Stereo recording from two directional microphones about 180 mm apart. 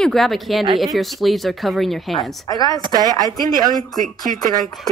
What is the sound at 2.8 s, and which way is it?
Speech, 20° right (ahead or behind).